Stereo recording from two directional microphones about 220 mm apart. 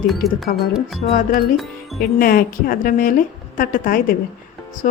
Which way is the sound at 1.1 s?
35° left (ahead or behind).